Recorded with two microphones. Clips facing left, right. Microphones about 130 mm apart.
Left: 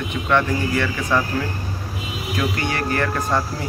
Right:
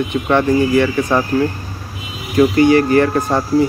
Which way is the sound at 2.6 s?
20° right (ahead or behind).